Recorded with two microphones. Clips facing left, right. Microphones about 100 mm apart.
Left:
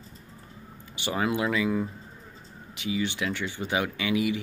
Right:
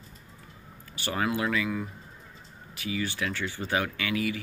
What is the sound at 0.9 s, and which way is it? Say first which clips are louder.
Speech: left 2 dB; 20° left (ahead or behind).